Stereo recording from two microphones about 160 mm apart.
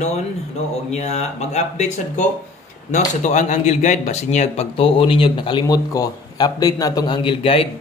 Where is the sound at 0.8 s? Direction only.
45° left (ahead or behind).